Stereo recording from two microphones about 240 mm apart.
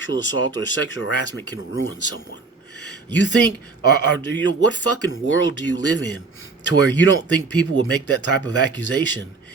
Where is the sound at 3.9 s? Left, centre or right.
Left.